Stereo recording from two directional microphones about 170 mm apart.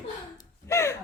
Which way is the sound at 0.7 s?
15° left (ahead or behind).